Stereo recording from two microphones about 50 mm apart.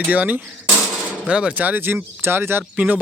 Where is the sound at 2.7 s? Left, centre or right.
Right.